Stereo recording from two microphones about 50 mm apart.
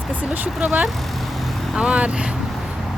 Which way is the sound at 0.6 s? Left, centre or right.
Right.